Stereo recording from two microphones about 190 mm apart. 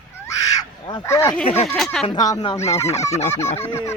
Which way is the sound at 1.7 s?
Centre (ahead or behind).